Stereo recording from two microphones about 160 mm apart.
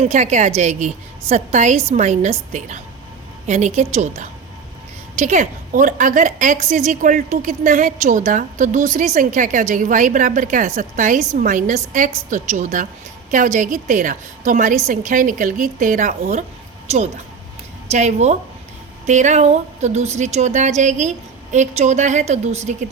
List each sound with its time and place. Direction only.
0.0 s a woman's voice: 45° right (ahead or behind)
17.9 s a woman's voice: 45° right (ahead or behind)